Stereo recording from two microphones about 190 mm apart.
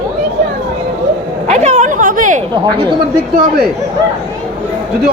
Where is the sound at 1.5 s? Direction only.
35° right (ahead or behind).